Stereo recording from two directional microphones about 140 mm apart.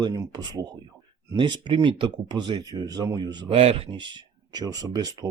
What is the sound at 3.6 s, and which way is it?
Speech, 45° right (ahead or behind).